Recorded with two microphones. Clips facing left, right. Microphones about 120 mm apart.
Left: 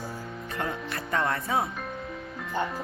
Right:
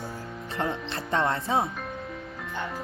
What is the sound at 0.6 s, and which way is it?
Speech, 25° right (ahead or behind).